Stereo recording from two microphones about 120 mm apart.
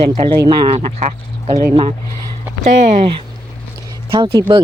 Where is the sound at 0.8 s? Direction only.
70° right (ahead or behind).